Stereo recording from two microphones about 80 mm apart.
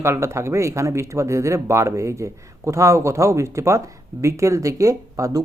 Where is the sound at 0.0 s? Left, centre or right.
Right.